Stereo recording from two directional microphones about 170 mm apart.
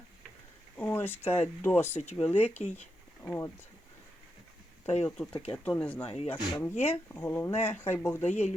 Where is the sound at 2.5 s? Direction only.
40° left (ahead or behind).